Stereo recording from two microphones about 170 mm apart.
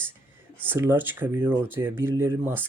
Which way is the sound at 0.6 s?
15° right (ahead or behind).